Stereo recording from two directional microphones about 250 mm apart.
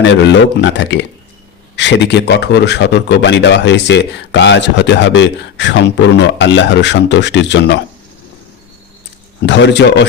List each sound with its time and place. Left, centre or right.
0.0 s speech: left
9.5 s speech: left